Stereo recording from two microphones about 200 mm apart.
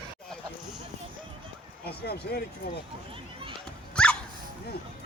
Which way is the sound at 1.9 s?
55° left (ahead or behind).